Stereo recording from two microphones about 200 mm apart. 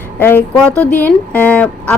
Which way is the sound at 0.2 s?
10° left (ahead or behind).